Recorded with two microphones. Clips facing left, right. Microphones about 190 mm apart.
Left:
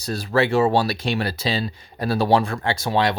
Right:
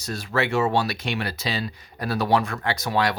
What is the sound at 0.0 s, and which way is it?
Speech, 35° left (ahead or behind).